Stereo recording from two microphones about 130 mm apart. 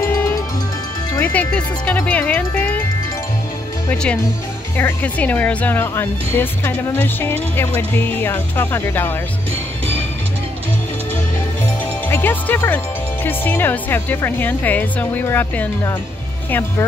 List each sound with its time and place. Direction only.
0.1 s music: 20° left (ahead or behind)
1.1 s speech: 15° left (ahead or behind)
3.9 s speech: 10° left (ahead or behind)
12.1 s speech: 15° left (ahead or behind)